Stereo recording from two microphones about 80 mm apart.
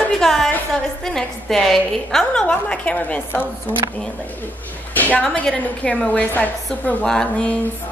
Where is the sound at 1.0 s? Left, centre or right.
Centre.